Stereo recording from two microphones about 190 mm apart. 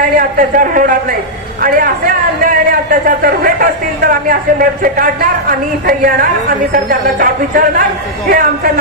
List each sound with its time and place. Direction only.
0.4 s a man's voice: 45° right (ahead or behind)